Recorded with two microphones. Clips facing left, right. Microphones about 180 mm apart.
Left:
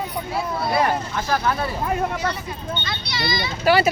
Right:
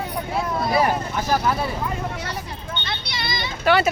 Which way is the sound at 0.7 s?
10° right (ahead or behind).